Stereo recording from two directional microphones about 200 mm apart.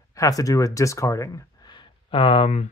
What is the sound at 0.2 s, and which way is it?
Speech, 15° left (ahead or behind).